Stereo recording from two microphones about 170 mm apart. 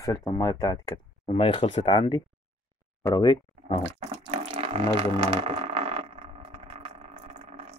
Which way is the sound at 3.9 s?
30° right (ahead or behind).